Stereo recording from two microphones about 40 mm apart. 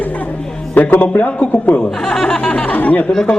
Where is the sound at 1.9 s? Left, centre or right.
Centre.